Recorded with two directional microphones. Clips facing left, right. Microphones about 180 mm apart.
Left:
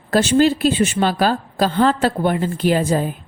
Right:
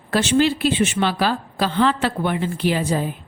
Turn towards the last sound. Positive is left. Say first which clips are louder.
# left 3 dB
turn(degrees=45)  # may be behind; listen again after turning